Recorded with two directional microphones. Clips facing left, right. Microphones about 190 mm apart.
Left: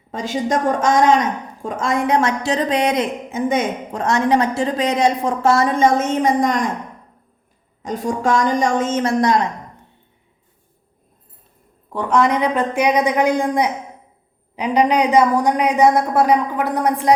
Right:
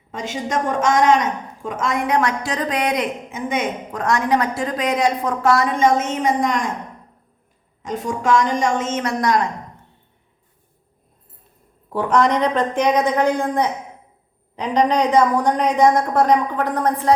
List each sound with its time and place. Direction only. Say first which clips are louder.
0.1 s a woman's voice: left 4 dB; 35° left (ahead or behind)
7.8 s a woman's voice: left 3 dB; 40° left (ahead or behind)
11.9 s a woman's voice: even; 5° right (ahead or behind)